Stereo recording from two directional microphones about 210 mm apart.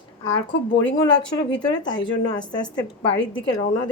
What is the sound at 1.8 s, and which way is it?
A woman's voice, 20° left (ahead or behind).